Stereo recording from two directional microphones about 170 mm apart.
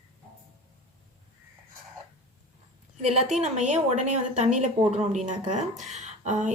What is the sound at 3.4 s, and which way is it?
A woman's voice, 40° right (ahead or behind).